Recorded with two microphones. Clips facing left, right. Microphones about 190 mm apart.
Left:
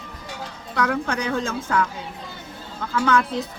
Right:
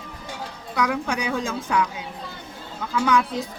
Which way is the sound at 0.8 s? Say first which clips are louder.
Left 1 dB; 10° right (ahead or behind).